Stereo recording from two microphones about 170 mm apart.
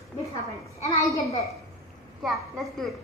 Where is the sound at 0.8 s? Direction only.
20° left (ahead or behind).